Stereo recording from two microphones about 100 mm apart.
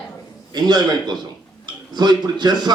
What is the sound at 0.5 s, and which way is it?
Speech, 45° right (ahead or behind).